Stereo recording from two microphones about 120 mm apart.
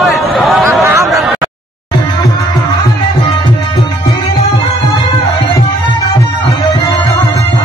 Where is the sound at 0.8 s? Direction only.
25° right (ahead or behind).